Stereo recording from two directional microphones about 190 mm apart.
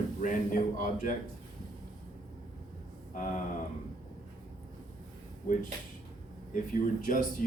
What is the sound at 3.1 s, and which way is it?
Speech, 45° left (ahead or behind).